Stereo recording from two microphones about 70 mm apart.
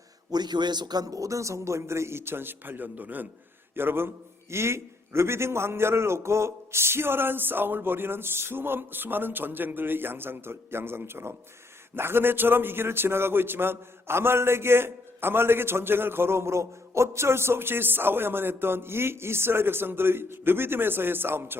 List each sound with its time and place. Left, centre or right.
0.3 s a man's voice: right